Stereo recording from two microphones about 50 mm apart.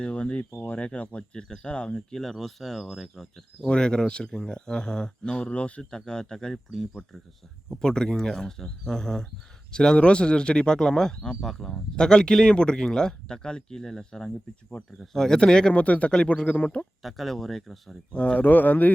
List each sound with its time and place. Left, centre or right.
0.0 s speech: left
2.0 s speech: centre
3.7 s speech: centre
7.7 s speech: centre
15.7 s speech: left
17.0 s speech: centre
18.1 s speech: centre
18.3 s speech: left